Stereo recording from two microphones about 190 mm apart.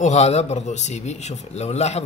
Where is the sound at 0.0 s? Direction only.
35° left (ahead or behind).